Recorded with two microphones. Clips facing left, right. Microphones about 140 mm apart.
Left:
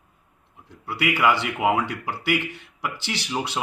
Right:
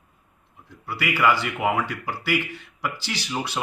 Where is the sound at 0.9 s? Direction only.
20° left (ahead or behind).